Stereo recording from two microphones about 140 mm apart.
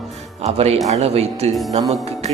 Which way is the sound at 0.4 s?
50° right (ahead or behind).